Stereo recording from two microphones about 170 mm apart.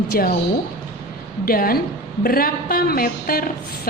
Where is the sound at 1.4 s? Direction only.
60° left (ahead or behind).